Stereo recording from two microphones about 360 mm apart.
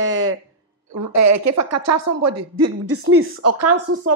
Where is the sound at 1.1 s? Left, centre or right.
Right.